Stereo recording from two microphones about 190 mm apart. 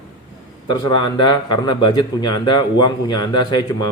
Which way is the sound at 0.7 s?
20° left (ahead or behind).